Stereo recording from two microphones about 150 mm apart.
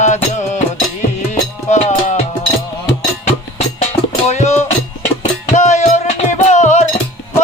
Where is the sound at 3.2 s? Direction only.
45° left (ahead or behind).